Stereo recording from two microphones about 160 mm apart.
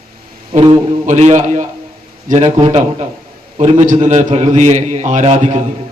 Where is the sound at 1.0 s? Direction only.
45° right (ahead or behind).